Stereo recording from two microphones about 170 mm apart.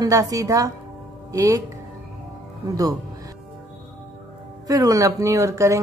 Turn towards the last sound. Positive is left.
turn(degrees=-20)  # may be behind; listen again after turning